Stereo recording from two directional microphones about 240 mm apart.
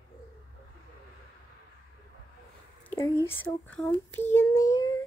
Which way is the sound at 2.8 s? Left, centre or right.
Centre.